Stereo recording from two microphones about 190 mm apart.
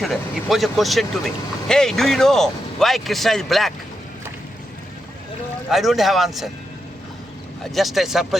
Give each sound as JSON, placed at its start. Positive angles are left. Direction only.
{"t": 0.0, "sound": "speech", "side_deg": 0}
{"t": 5.7, "sound": "speech", "side_deg": 0}
{"t": 7.6, "sound": "speech", "side_deg": 0}